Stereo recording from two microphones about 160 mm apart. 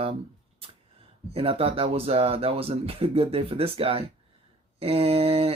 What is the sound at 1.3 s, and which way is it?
Speech, 35° right (ahead or behind).